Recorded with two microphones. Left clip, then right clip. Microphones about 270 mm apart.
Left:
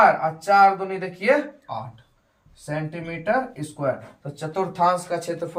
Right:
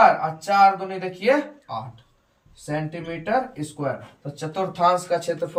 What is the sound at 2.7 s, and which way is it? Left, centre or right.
Speech, centre.